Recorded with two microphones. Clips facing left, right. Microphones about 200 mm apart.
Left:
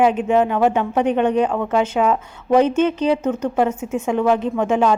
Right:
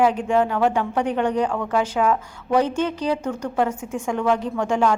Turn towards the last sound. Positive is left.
turn(degrees=20)  # may be behind; listen again after turning